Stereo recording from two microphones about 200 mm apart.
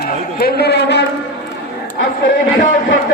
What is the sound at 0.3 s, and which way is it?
Speech, 50° left (ahead or behind).